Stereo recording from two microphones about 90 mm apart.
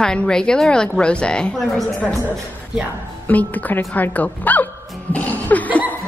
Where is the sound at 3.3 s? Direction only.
15° left (ahead or behind).